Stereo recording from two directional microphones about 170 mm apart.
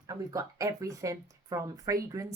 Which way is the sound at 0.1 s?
20° right (ahead or behind).